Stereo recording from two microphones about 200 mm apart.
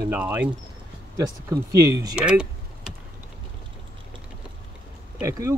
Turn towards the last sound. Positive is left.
turn(degrees=-15)  # may be behind; listen again after turning